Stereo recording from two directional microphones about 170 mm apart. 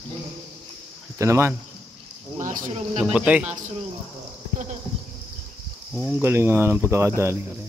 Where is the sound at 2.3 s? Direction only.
50° right (ahead or behind).